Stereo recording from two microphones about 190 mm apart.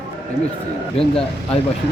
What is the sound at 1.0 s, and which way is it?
Speech, 30° left (ahead or behind).